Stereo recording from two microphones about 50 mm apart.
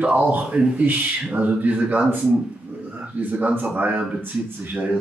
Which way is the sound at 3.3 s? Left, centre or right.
Right.